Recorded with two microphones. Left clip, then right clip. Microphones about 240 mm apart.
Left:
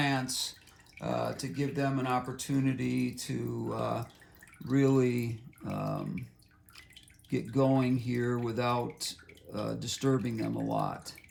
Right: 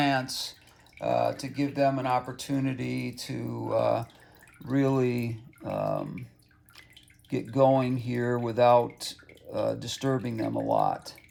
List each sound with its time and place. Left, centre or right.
0.0 s speech: right
7.3 s speech: right